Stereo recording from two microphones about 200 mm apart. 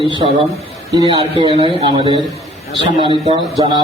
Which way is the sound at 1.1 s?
25° right (ahead or behind).